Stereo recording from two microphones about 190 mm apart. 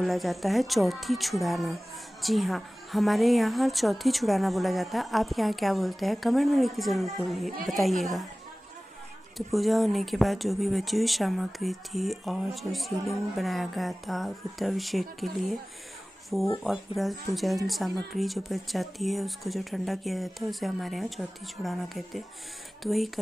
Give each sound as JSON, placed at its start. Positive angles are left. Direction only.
{"t": 0.0, "sound": "speech", "side_deg": 0}
{"t": 9.5, "sound": "speech", "side_deg": 0}